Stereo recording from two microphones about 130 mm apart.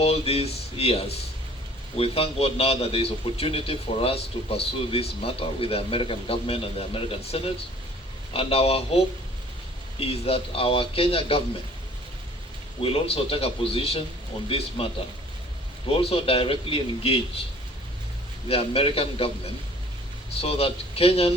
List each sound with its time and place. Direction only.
0.0 s a man's voice: 50° left (ahead or behind)
10.0 s a man's voice: 50° left (ahead or behind)
12.8 s a man's voice: 45° left (ahead or behind)
16.0 s a man's voice: 45° left (ahead or behind)
18.4 s a man's voice: 50° left (ahead or behind)
20.4 s a man's voice: 50° left (ahead or behind)